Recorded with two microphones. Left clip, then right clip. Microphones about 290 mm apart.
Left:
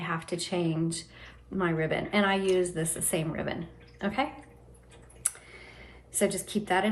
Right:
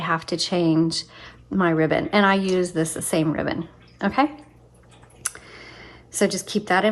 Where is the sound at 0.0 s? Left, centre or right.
Right.